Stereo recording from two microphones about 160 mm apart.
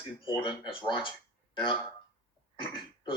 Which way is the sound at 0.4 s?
30° left (ahead or behind).